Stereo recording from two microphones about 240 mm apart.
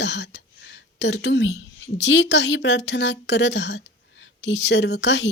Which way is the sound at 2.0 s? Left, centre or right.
Left.